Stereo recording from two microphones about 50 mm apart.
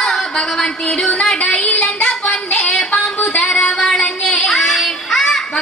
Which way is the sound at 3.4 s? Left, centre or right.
Centre.